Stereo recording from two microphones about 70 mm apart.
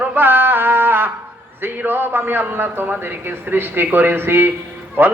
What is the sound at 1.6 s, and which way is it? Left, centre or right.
A man's voice, right.